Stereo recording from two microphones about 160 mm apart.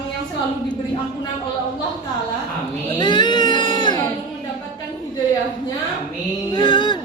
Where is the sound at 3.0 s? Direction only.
30° left (ahead or behind).